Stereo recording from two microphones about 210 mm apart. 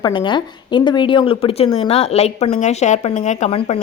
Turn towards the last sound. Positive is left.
turn(degrees=25)  # may be behind; listen again after turning